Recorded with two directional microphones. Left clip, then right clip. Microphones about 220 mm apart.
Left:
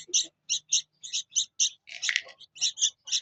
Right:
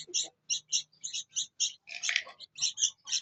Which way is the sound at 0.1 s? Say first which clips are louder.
Left 6 dB; 40° left (ahead or behind).